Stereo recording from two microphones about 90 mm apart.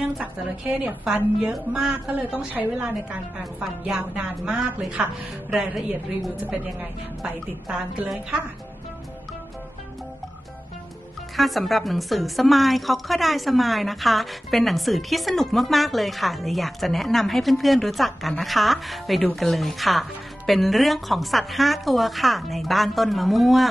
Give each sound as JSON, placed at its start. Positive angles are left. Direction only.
{"t": 0.0, "sound": "a woman's voice", "side_deg": -15}
{"t": 11.3, "sound": "a woman's voice", "side_deg": 0}